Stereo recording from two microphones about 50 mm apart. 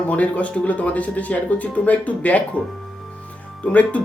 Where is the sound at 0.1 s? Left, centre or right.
Left.